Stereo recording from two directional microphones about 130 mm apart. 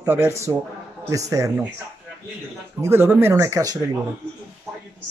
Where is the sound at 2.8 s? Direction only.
15° right (ahead or behind).